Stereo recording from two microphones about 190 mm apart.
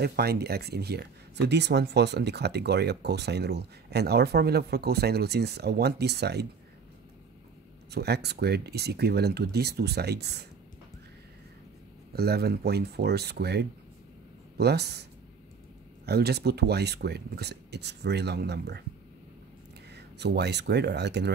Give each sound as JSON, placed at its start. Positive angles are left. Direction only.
{"t": 0.0, "sound": "speech", "side_deg": -55}
{"t": 7.9, "sound": "speech", "side_deg": -60}
{"t": 12.1, "sound": "speech", "side_deg": -55}
{"t": 16.1, "sound": "speech", "side_deg": -60}
{"t": 19.9, "sound": "speech", "side_deg": -60}